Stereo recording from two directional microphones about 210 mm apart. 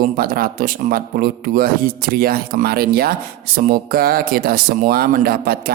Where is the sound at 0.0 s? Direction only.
45° right (ahead or behind).